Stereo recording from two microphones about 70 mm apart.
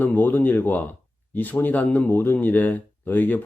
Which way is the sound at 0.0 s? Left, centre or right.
Left.